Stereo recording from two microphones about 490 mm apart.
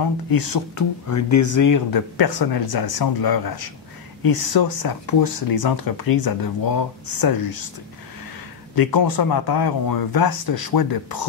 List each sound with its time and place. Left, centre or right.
0.3 s speech: left
8.7 s speech: left